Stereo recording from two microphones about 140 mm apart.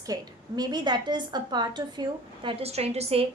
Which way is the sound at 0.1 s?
30° right (ahead or behind).